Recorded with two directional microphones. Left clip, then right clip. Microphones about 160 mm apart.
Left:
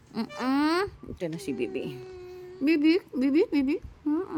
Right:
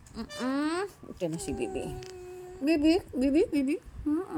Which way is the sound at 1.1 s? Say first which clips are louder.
Left 1 dB; 20° left (ahead or behind).